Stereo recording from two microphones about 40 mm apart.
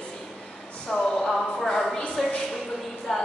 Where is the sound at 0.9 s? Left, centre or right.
Centre.